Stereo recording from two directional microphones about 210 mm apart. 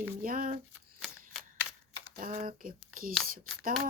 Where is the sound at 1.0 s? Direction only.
Centre (ahead or behind).